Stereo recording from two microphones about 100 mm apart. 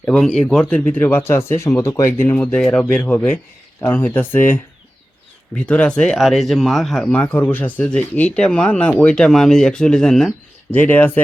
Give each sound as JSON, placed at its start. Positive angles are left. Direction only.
{"t": 0.1, "sound": "speech", "side_deg": 5}
{"t": 2.1, "sound": "speech", "side_deg": 20}
{"t": 2.9, "sound": "speech", "side_deg": 20}
{"t": 6.1, "sound": "speech", "side_deg": 0}
{"t": 7.1, "sound": "speech", "side_deg": 15}
{"t": 10.7, "sound": "speech", "side_deg": 15}